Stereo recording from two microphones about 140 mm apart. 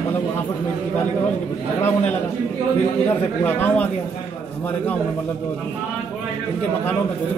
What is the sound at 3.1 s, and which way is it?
Speech, 15° left (ahead or behind).